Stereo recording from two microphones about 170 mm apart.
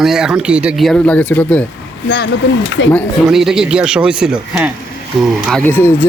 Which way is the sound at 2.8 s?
90° left.